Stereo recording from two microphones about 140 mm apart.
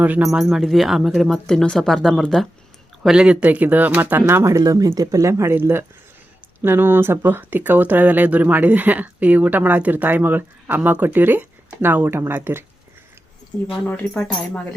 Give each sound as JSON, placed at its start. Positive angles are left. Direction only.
{"t": 0.0, "sound": "speech", "side_deg": -10}
{"t": 13.7, "sound": "speech", "side_deg": 5}